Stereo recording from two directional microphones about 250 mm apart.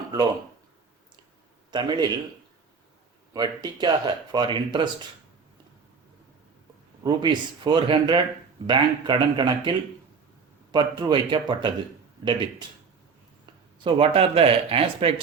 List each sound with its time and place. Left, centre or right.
1.7 s speech: centre
3.3 s speech: centre
7.0 s speech: centre
10.7 s speech: centre